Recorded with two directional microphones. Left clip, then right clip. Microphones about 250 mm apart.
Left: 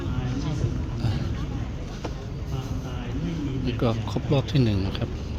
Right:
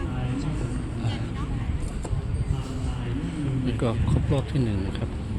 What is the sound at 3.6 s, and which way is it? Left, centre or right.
Speech, centre.